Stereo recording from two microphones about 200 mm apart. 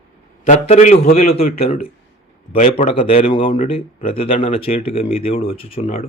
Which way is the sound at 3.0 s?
30° left (ahead or behind).